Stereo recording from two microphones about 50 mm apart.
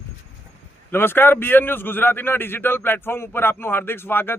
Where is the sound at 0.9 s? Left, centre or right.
Left.